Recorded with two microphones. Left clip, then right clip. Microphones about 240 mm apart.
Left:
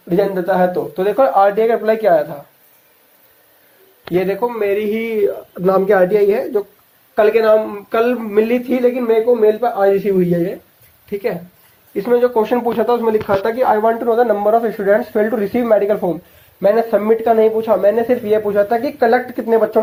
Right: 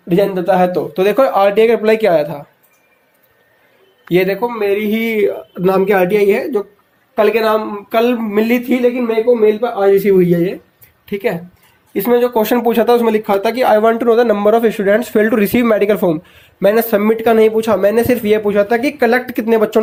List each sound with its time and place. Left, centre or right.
0.1 s speech: right
4.1 s speech: right
4.4 s speech: right